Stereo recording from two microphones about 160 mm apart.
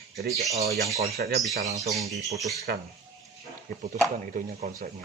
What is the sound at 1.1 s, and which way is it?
Speech, 75° right (ahead or behind).